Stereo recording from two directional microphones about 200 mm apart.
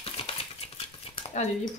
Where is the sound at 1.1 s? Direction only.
35° left (ahead or behind).